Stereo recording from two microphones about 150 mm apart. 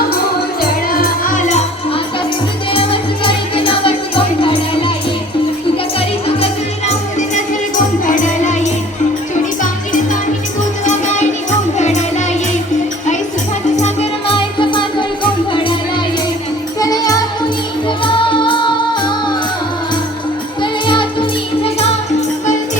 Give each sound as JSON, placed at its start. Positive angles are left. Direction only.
{"t": 0.9, "sound": "music", "side_deg": 75}
{"t": 1.5, "sound": "music", "side_deg": 50}
{"t": 2.7, "sound": "music", "side_deg": 35}
{"t": 8.0, "sound": "music", "side_deg": 60}
{"t": 10.8, "sound": "music", "side_deg": 55}
{"t": 13.7, "sound": "music", "side_deg": 45}
{"t": 16.8, "sound": "music", "side_deg": 25}
{"t": 20.6, "sound": "music", "side_deg": 30}